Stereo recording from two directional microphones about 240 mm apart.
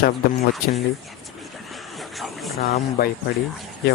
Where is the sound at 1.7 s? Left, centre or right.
Centre.